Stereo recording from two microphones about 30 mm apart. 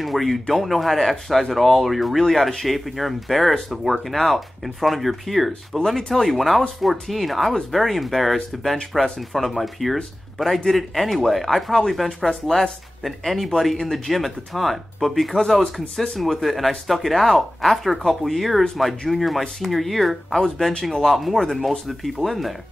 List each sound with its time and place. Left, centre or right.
0.0 s speech: centre
5.9 s speech: centre
12.3 s speech: centre
13.0 s speech: centre
20.3 s speech: centre
21.0 s speech: centre